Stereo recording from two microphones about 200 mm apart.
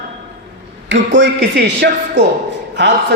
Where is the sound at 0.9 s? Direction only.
65° right (ahead or behind).